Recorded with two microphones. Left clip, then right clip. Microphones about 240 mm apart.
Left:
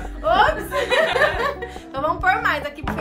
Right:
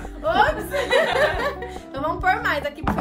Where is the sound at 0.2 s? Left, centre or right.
Centre.